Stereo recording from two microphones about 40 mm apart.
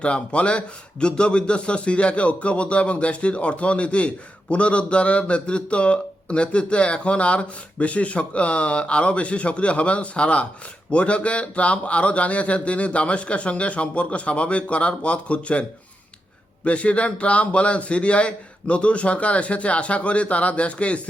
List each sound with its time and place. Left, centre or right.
0.0 s speech: left
16.6 s speech: left